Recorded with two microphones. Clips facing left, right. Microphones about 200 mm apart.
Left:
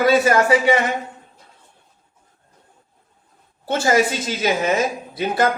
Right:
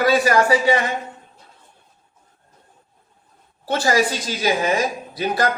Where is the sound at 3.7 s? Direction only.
25° left (ahead or behind).